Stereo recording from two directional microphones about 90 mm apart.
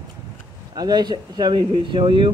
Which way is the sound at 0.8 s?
50° right (ahead or behind).